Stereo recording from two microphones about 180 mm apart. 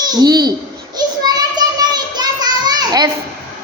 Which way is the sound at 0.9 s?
20° right (ahead or behind).